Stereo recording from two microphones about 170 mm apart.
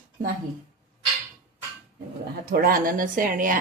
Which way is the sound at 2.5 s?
60° right (ahead or behind).